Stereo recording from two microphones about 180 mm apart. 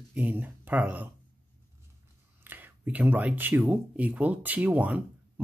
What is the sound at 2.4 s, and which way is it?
Speech, 10° right (ahead or behind).